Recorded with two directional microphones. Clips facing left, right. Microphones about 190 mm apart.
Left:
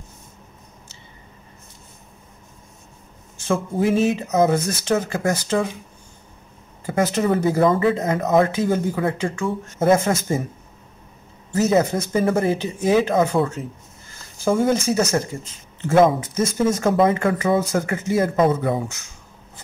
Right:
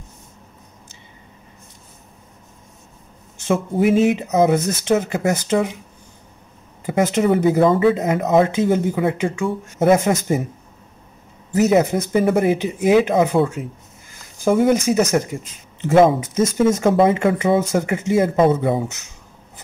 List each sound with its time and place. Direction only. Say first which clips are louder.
3.4 s speech: right 3 dB; 20° right (ahead or behind)
6.9 s speech: right 3 dB; 20° right (ahead or behind)
7.6 s speech: right 2 dB; centre (ahead or behind)
7.9 s speech: right 2 dB; 20° right (ahead or behind)
11.5 s speech: right 3 dB; 15° right (ahead or behind)
14.4 s speech: right 3 dB; 15° right (ahead or behind)